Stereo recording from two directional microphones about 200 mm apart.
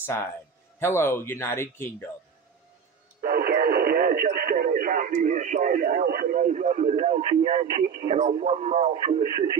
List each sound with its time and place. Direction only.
0.0 s a man's voice: 10° left (ahead or behind)
3.2 s speech: 50° right (ahead or behind)